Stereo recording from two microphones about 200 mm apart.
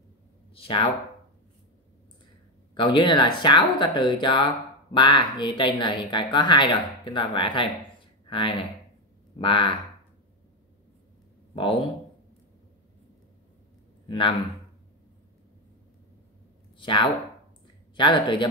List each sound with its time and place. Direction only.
0.6 s speech: 25° left (ahead or behind)
2.7 s speech: 25° left (ahead or behind)
14.0 s speech: 25° left (ahead or behind)
16.7 s speech: 25° left (ahead or behind)